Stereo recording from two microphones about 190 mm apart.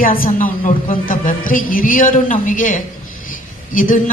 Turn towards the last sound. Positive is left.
turn(degrees=45)  # may be behind; listen again after turning